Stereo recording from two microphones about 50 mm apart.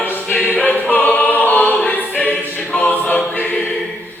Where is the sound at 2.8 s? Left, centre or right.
Left.